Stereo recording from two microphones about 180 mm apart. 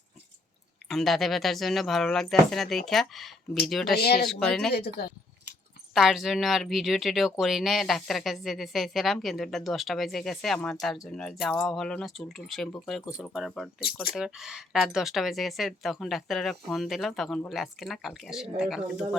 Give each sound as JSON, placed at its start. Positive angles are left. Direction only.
{"t": 0.9, "sound": "speech", "side_deg": 0}
{"t": 4.0, "sound": "speech", "side_deg": 60}
{"t": 4.3, "sound": "speech", "side_deg": 5}
{"t": 4.7, "sound": "speech", "side_deg": 60}
{"t": 5.9, "sound": "speech", "side_deg": 0}